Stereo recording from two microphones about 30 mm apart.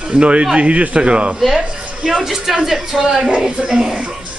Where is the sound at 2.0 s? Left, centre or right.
Centre.